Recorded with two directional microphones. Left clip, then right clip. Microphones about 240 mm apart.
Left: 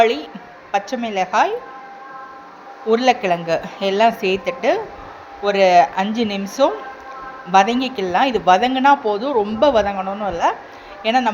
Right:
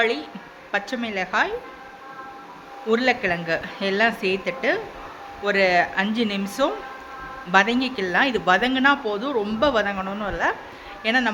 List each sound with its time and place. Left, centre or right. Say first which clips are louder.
0.0 s a woman's voice: left 7 dB; centre
2.9 s a woman's voice: left 5 dB; centre